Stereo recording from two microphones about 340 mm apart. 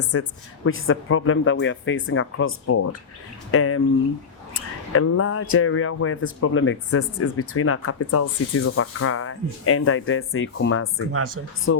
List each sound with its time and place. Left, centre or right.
0.1 s speech: left